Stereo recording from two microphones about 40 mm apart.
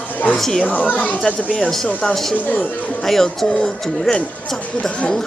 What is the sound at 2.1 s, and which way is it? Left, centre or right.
Speech, centre.